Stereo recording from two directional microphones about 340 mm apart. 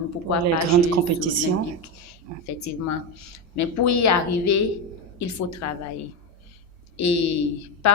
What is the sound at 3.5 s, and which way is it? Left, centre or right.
A woman's voice, left.